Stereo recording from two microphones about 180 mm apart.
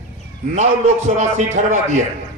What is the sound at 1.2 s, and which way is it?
Speech, 40° right (ahead or behind).